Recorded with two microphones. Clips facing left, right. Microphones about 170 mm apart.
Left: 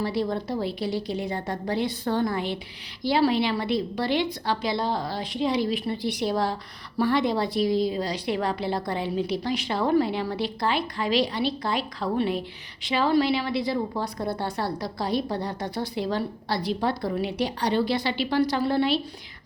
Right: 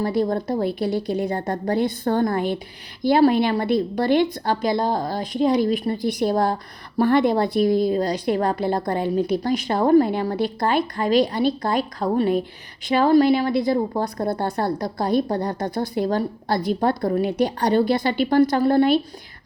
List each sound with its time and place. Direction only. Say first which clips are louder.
0.0 s a woman's voice: right 5 dB; 45° right (ahead or behind)